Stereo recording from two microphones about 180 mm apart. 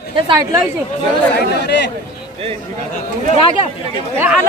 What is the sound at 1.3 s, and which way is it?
Speech, 70° left (ahead or behind).